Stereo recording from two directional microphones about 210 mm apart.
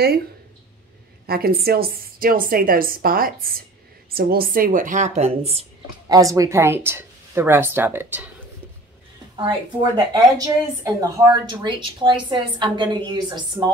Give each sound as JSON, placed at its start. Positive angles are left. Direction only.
{"t": 1.2, "sound": "a woman's voice", "side_deg": -45}
{"t": 6.0, "sound": "speech", "side_deg": -15}
{"t": 9.4, "sound": "a woman's voice", "side_deg": -25}